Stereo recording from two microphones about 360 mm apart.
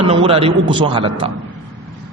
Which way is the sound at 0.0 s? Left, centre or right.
Centre.